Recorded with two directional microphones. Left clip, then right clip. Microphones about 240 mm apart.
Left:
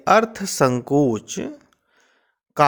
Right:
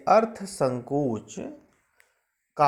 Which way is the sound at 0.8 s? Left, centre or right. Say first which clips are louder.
Left 8 dB; left.